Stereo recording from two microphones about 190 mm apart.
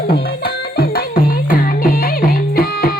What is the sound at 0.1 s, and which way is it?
Music, 55° left (ahead or behind).